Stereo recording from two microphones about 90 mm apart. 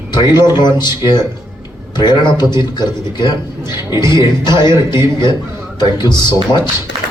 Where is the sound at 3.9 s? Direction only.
35° right (ahead or behind).